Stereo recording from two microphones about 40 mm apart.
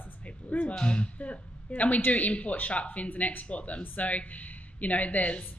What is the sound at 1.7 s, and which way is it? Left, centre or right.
Speech, left.